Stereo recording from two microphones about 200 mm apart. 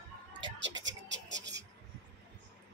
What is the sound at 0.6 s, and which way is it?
Scratch, 65° right (ahead or behind).